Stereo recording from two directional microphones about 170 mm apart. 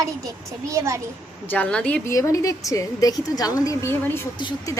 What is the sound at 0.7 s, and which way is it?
Speech, 15° right (ahead or behind).